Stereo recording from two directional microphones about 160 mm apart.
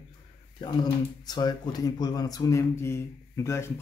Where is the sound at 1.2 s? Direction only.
25° left (ahead or behind).